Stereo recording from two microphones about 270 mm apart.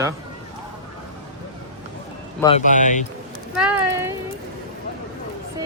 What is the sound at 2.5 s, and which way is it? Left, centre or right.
Speech, left.